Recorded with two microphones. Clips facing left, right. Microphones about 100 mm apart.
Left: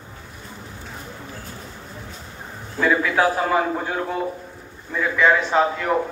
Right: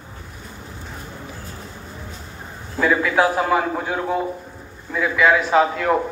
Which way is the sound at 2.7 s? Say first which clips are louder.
Right 1 dB; 5° right (ahead or behind).